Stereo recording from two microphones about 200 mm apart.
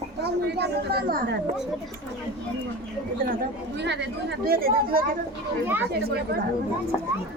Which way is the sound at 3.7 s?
60° right (ahead or behind).